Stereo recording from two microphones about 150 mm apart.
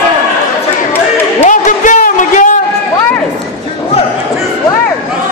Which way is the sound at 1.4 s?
55° left (ahead or behind).